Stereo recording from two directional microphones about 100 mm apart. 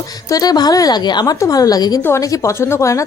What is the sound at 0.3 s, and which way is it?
A woman's voice, 40° left (ahead or behind).